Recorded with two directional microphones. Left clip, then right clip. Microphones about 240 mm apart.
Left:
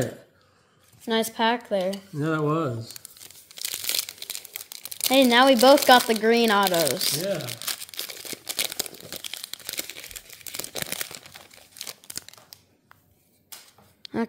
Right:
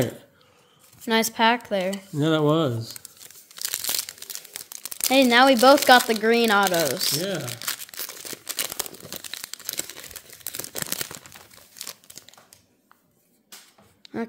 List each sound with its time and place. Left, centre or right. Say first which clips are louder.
1.0 s a woman's voice: right 3 dB; centre
2.1 s speech: right 5 dB; right
3.5 s crumpling: even; centre
4.8 s speech: even; centre
7.4 s crumpling: right 1 dB; centre
11.7 s crumpling: even; centre
12.2 s crumpling: left 6 dB; left
14.0 s a sound: left 3 dB; centre